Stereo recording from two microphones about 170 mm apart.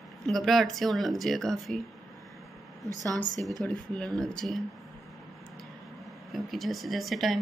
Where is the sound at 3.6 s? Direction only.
5° left (ahead or behind).